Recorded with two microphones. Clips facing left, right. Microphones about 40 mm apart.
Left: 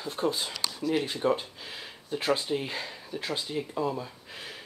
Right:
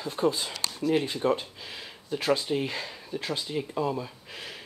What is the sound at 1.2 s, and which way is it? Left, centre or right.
Speech, centre.